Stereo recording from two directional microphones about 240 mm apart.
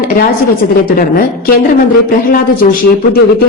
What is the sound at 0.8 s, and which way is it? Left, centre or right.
A woman's voice, left.